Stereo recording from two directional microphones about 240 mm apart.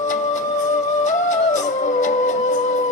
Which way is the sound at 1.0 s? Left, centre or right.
Left.